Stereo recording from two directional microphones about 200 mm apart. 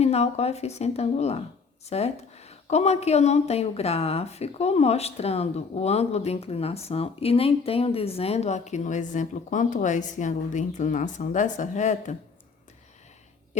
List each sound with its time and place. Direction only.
0.0 s a woman's voice: 30° left (ahead or behind)